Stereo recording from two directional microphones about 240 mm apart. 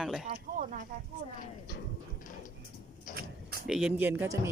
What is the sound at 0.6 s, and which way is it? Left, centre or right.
Speech, right.